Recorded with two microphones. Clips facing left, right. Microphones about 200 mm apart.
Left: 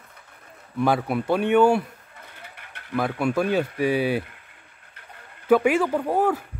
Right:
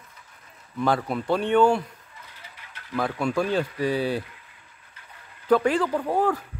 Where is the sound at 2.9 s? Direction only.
5° left (ahead or behind).